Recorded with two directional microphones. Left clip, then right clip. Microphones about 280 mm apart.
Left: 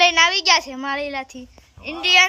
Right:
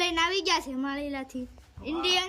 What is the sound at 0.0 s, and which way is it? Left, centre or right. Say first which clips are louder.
A child's voice: left 11 dB; centre.